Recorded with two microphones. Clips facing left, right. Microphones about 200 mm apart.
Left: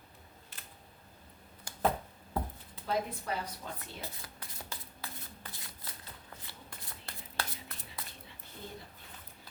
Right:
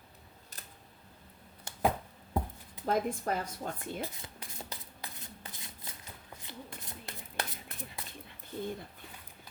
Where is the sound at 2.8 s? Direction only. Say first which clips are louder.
Right 4 dB; 50° right (ahead or behind).